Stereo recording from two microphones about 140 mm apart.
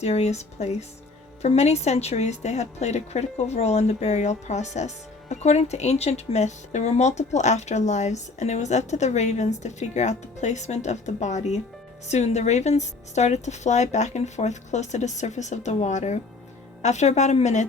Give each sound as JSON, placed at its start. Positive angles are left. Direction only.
{"t": 0.0, "sound": "a woman's voice", "side_deg": 50}